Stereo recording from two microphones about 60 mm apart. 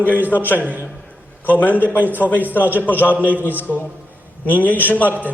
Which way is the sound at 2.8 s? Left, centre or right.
Left.